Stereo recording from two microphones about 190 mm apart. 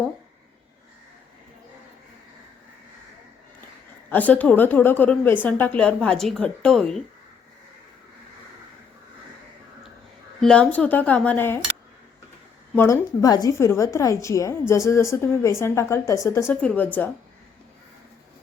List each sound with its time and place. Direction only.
4.1 s a woman's voice: 10° left (ahead or behind)
10.4 s a woman's voice: 5° left (ahead or behind)
12.7 s a woman's voice: 15° left (ahead or behind)